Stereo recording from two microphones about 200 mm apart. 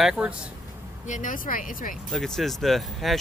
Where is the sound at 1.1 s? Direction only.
40° left (ahead or behind).